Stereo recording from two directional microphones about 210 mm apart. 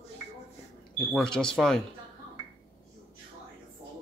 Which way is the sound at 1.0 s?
5° left (ahead or behind).